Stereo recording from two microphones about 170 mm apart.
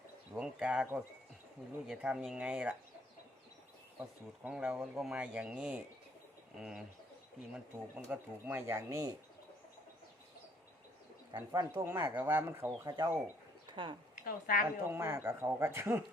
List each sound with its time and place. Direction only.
0.3 s speech: 5° right (ahead or behind)
4.4 s speech: 5° right (ahead or behind)
11.3 s speech: 25° right (ahead or behind)
13.7 s a sound: 25° right (ahead or behind)
14.3 s a woman's voice: 55° left (ahead or behind)
14.8 s speech: 15° right (ahead or behind)